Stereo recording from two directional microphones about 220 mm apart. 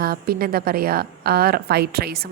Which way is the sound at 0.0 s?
45° right (ahead or behind).